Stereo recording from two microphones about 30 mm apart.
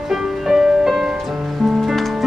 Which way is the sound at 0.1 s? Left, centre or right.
Centre.